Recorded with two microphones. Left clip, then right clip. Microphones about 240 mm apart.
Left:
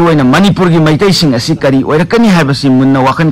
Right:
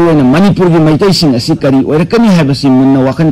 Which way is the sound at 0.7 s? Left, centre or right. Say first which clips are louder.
Right 1 dB; left.